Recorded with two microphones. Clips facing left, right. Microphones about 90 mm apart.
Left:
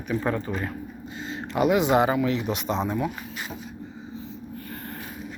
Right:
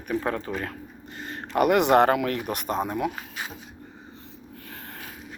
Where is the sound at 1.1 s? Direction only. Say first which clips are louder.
Left 2 dB; 60° right (ahead or behind).